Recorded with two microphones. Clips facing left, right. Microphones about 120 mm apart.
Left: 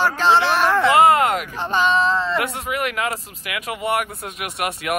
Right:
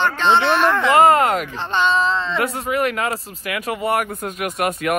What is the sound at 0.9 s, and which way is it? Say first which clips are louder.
Speech: right 3 dB; 40° right (ahead or behind).